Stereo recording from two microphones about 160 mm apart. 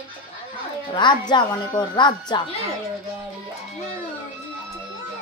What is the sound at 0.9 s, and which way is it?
A woman's voice, 30° left (ahead or behind).